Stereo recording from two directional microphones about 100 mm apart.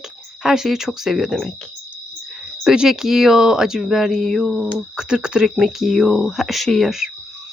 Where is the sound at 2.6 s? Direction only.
5° right (ahead or behind).